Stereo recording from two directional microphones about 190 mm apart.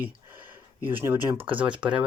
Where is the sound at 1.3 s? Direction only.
25° right (ahead or behind).